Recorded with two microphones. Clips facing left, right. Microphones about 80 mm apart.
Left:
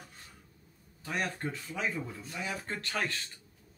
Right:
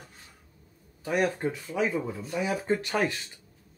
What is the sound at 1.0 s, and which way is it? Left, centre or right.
Speech, centre.